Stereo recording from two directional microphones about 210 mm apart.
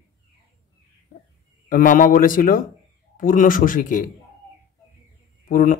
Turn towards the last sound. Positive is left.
turn(degrees=40)  # may be behind; listen again after turning